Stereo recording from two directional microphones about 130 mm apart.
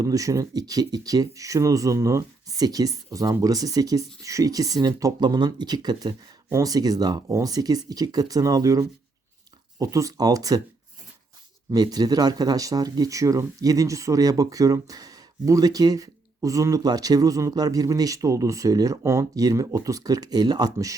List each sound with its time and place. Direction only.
0.0 s speech: 25° right (ahead or behind)
11.7 s speech: 30° right (ahead or behind)